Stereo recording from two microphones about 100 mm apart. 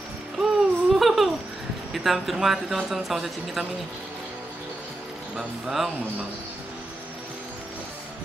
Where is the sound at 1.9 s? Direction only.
Centre (ahead or behind).